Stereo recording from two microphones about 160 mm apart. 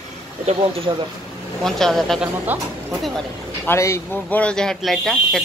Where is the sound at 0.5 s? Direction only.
35° right (ahead or behind).